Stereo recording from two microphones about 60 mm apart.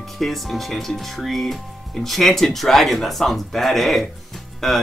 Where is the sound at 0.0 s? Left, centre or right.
Centre.